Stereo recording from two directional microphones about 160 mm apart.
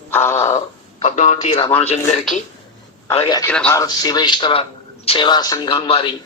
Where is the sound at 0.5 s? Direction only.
45° left (ahead or behind).